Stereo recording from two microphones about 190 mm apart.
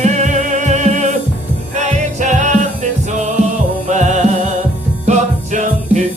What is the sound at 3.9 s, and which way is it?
Music, 40° right (ahead or behind).